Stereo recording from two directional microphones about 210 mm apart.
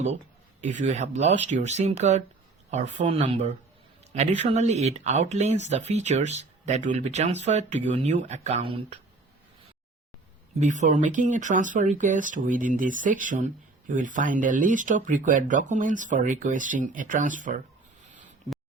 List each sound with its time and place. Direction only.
0.6 s speech: 35° right (ahead or behind)
10.6 s speech: 35° right (ahead or behind)